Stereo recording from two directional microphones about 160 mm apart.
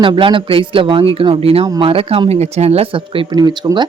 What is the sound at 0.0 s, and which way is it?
Speech, 30° right (ahead or behind).